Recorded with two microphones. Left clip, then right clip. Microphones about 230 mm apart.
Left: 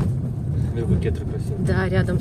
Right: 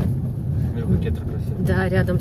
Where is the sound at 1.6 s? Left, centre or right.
Centre.